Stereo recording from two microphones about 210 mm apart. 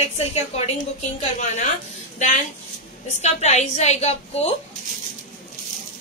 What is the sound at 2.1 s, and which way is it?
A woman's voice, 35° left (ahead or behind).